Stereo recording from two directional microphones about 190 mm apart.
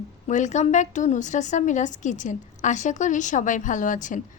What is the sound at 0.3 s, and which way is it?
A woman's voice, 40° left (ahead or behind).